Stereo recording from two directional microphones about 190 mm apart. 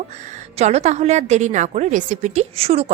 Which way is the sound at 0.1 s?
40° right (ahead or behind).